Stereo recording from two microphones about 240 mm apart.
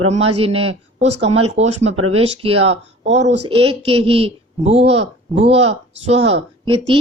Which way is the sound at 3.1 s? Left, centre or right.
Right.